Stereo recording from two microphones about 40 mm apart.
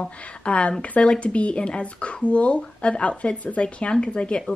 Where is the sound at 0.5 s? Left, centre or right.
Left.